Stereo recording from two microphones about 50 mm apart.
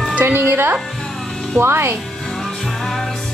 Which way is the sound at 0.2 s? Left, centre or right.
Right.